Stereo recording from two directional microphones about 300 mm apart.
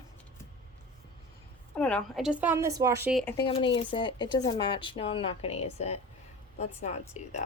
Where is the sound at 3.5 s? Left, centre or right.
Centre.